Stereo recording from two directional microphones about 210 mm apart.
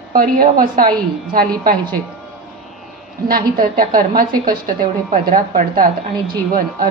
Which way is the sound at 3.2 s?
45° right (ahead or behind).